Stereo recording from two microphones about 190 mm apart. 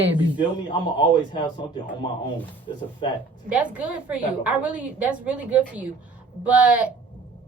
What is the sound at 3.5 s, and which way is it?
A woman's voice, 5° right (ahead or behind).